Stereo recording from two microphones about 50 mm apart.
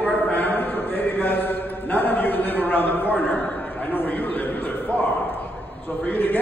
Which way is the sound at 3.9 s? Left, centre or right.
Left.